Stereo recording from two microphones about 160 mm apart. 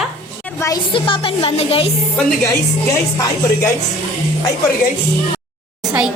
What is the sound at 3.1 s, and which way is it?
Music, 25° left (ahead or behind).